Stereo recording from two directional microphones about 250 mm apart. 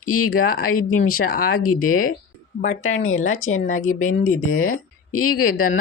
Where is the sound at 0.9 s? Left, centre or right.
Left.